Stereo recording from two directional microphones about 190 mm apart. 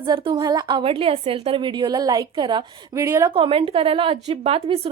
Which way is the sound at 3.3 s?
30° right (ahead or behind).